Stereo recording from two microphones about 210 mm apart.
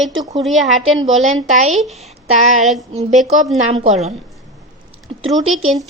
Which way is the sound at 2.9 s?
30° right (ahead or behind).